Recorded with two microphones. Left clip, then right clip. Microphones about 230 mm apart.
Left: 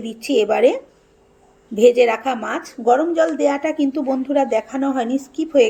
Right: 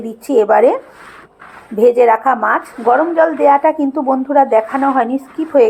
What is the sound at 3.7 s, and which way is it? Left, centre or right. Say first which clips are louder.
Speech: right 6 dB; centre.